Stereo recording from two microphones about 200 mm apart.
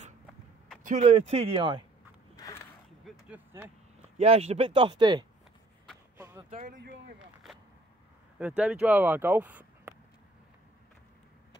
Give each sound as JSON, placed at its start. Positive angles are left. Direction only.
{"t": 0.8, "sound": "speech", "side_deg": -35}
{"t": 2.3, "sound": "a sound", "side_deg": 15}
{"t": 3.1, "sound": "vehicle", "side_deg": -10}
{"t": 4.2, "sound": "speech", "side_deg": -30}
{"t": 6.1, "sound": "a sound", "side_deg": -15}
{"t": 6.5, "sound": "speech", "side_deg": -40}
{"t": 8.4, "sound": "speech", "side_deg": -5}